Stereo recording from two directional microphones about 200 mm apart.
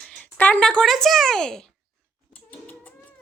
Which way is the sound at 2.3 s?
10° left (ahead or behind).